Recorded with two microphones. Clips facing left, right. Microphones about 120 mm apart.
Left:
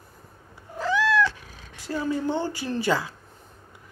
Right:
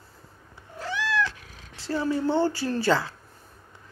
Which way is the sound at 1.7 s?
15° left (ahead or behind).